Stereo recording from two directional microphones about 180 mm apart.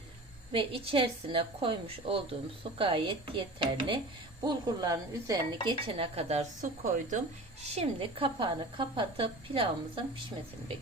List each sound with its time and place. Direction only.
0.5 s a woman's voice: 30° right (ahead or behind)
7.6 s speech: 35° right (ahead or behind)